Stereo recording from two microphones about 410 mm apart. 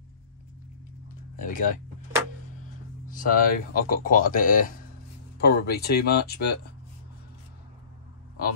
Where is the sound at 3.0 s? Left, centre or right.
Centre.